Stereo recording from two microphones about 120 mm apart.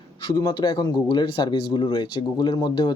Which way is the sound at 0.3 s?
35° left (ahead or behind).